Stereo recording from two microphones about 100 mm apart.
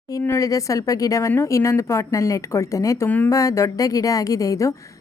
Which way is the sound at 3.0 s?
20° left (ahead or behind).